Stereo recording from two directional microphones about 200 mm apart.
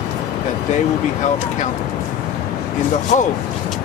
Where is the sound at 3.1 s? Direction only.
35° left (ahead or behind).